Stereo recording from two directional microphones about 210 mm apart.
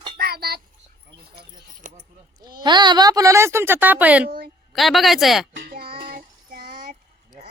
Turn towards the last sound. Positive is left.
turn(degrees=-40)  # may be behind; listen again after turning